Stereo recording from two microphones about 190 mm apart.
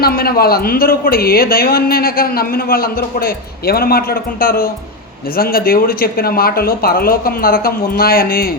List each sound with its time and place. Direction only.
0.0 s a man's voice: 50° left (ahead or behind)